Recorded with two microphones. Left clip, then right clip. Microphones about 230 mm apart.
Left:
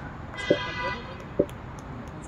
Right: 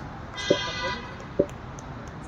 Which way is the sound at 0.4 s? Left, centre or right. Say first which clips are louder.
Right 1 dB; right.